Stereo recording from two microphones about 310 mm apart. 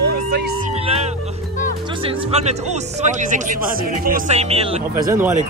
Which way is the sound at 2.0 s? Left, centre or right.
Right.